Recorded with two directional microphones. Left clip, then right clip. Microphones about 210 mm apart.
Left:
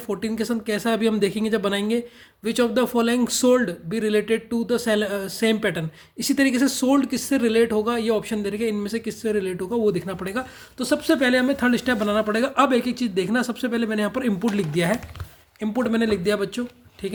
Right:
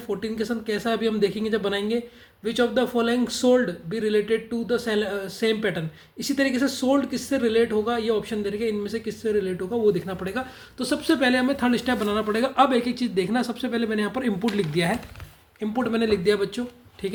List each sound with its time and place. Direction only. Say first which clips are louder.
0.1 s speech: left 1 dB; 45° left (ahead or behind)